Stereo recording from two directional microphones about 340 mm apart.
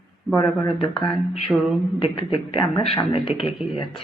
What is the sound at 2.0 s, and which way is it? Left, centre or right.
A man's voice, centre.